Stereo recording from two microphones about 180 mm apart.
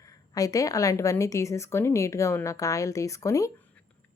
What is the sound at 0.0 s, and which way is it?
Speech, 20° left (ahead or behind).